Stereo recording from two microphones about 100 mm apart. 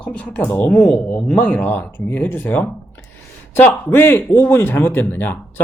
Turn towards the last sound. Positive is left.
turn(degrees=20)  # may be behind; listen again after turning